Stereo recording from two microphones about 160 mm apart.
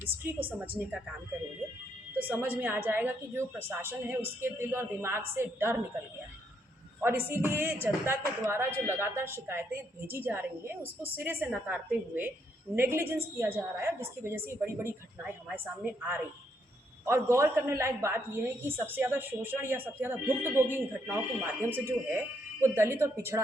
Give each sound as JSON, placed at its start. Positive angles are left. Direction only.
{"t": 0.0, "sound": "speech", "side_deg": -10}
{"t": 2.2, "sound": "speech", "side_deg": -10}
{"t": 7.0, "sound": "speech", "side_deg": -15}